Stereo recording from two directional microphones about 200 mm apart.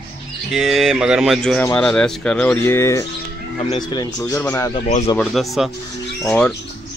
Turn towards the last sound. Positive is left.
turn(degrees=5)  # may be behind; listen again after turning